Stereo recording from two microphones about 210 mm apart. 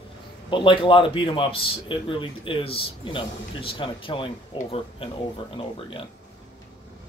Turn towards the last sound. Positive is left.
turn(degrees=25)  # may be behind; listen again after turning